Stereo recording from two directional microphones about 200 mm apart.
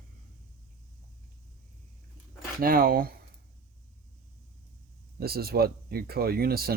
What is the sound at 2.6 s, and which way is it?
Speech, 45° right (ahead or behind).